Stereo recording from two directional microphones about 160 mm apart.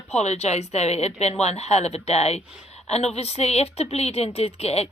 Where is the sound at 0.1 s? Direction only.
45° left (ahead or behind).